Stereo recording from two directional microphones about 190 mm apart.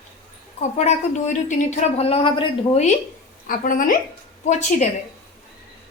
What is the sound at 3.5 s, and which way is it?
A woman's voice, 45° left (ahead or behind).